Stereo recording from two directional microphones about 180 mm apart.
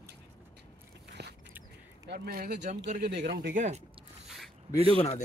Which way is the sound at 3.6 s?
40° right (ahead or behind).